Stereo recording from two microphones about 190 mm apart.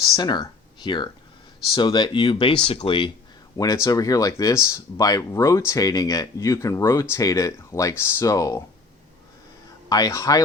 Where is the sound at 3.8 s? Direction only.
20° left (ahead or behind).